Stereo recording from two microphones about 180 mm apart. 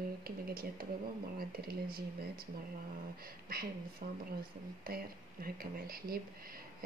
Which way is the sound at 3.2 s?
55° right (ahead or behind).